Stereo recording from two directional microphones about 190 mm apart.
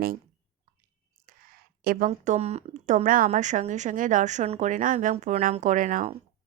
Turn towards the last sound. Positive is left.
turn(degrees=-45)  # may be behind; listen again after turning